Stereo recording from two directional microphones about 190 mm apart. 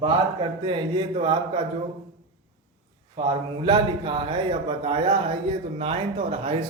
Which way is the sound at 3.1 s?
25° right (ahead or behind).